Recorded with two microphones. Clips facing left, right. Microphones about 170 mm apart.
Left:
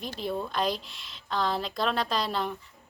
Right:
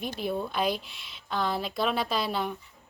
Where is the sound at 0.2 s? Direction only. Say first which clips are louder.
Even; 5° right (ahead or behind).